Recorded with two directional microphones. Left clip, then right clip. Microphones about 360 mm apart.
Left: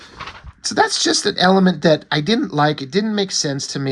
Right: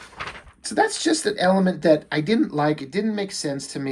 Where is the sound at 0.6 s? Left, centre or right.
Centre.